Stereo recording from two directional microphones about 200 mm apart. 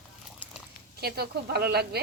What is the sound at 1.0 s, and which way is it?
Speech, 50° right (ahead or behind).